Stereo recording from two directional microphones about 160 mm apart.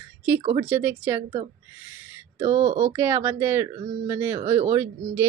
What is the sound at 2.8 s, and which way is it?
A woman's voice, 15° right (ahead or behind).